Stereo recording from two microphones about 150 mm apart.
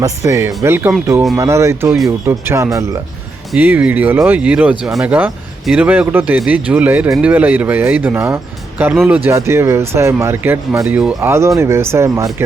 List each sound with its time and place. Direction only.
0.0 s speech: 20° right (ahead or behind)
3.5 s speech: 10° right (ahead or behind)